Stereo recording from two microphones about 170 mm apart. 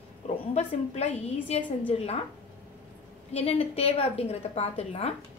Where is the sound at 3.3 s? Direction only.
35° left (ahead or behind).